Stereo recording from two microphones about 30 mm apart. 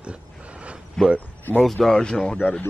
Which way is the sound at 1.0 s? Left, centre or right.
Left.